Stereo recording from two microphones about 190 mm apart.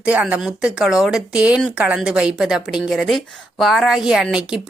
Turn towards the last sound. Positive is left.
turn(degrees=-5)  # may be behind; listen again after turning